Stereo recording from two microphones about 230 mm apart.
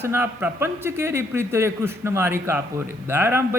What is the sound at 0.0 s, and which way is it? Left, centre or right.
Speech, centre.